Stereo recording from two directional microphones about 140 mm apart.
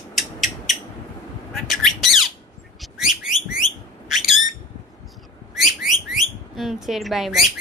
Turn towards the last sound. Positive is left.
turn(degrees=0)  # may be behind; listen again after turning